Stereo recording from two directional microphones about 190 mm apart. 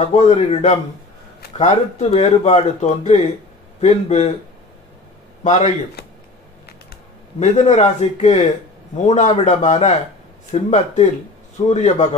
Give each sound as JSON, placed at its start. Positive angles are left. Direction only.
{"t": 0.0, "sound": "speech", "side_deg": 35}
{"t": 5.4, "sound": "speech", "side_deg": 40}
{"t": 7.3, "sound": "speech", "side_deg": 35}